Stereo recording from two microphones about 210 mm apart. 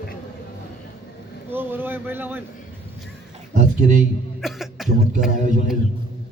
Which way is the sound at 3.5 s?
40° right (ahead or behind).